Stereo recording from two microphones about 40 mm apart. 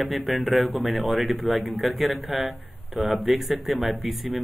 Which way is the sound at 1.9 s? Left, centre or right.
Centre.